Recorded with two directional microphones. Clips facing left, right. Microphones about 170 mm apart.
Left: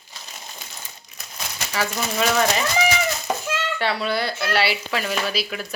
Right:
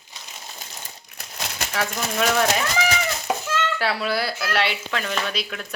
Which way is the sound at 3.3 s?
5° right (ahead or behind).